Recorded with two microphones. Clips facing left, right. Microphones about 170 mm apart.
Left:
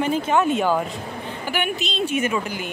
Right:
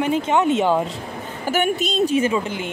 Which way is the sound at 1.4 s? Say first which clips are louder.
Right 6 dB; 45° right (ahead or behind).